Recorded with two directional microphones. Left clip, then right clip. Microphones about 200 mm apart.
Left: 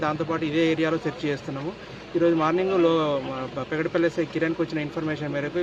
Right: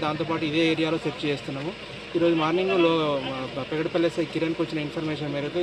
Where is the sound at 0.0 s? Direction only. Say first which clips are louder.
Left 1 dB; centre (ahead or behind).